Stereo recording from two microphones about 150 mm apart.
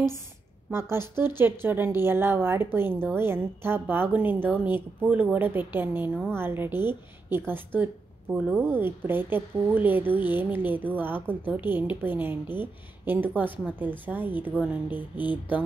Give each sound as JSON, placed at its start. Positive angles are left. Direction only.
{"t": 0.7, "sound": "a woman's voice", "side_deg": -15}